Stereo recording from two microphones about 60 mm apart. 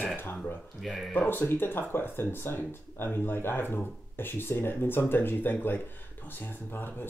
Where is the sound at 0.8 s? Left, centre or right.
Centre.